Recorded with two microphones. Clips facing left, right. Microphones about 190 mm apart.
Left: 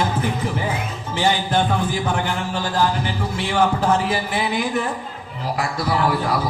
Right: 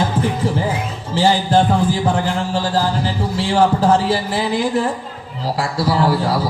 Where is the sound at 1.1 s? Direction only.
30° right (ahead or behind).